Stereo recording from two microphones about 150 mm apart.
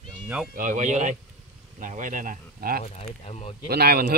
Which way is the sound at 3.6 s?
90° right.